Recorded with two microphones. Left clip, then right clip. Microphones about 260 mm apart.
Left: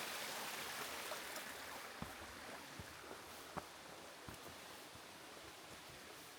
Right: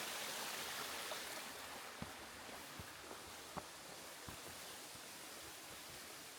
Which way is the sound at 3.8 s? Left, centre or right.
Centre.